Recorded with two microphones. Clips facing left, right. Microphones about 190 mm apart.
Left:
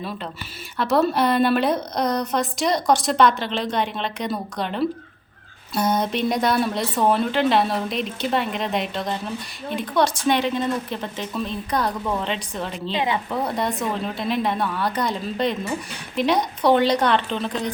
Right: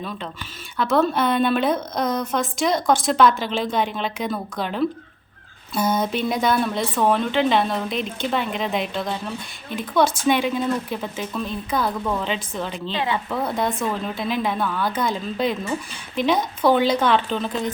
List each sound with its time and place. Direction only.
0.8 s a woman's voice: centre (ahead or behind)
12.9 s speech: 20° left (ahead or behind)
13.3 s a woman's voice: centre (ahead or behind)